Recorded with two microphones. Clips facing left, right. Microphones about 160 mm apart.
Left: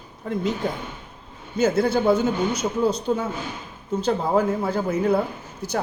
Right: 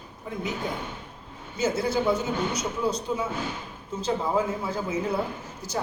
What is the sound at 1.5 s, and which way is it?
Speech, 55° left (ahead or behind).